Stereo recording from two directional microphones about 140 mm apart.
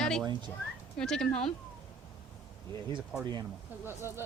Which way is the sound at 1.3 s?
50° left (ahead or behind).